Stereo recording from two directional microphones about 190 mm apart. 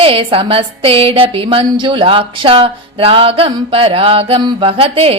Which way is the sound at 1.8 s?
25° right (ahead or behind).